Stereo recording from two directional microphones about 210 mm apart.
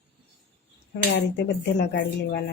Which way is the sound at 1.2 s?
55° left (ahead or behind).